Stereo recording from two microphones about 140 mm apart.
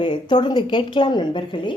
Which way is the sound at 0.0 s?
35° left (ahead or behind).